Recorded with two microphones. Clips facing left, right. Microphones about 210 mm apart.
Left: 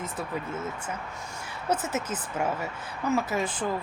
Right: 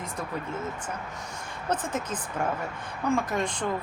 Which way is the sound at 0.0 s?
5° left (ahead or behind).